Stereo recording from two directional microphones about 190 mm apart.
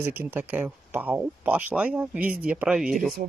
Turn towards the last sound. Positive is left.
turn(degrees=0)  # may be behind; listen again after turning